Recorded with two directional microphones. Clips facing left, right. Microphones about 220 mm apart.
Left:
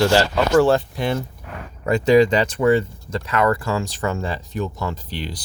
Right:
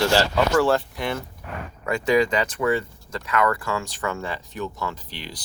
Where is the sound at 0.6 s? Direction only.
25° left (ahead or behind); by 4.9 s 40° left (ahead or behind).